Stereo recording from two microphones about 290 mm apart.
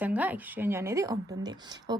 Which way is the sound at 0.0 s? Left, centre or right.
Centre.